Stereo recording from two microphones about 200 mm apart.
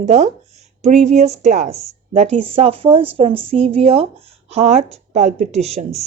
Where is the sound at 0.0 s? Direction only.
35° right (ahead or behind).